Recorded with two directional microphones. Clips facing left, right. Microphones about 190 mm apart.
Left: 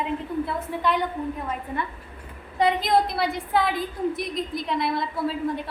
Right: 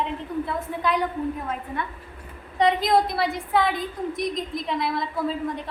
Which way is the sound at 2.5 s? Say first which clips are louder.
Right 1 dB; centre (ahead or behind).